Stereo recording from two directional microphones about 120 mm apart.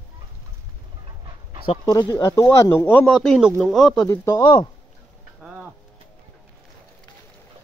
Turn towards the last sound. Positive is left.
turn(degrees=-10)  # may be behind; listen again after turning